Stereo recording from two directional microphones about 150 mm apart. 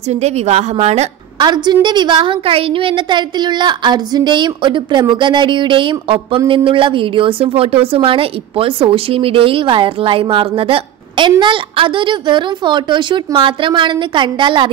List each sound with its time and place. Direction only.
0.1 s a woman's voice: 45° right (ahead or behind)
1.4 s a woman's voice: 30° right (ahead or behind)